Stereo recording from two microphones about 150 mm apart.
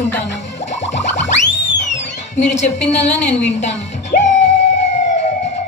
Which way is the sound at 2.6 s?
50° left (ahead or behind).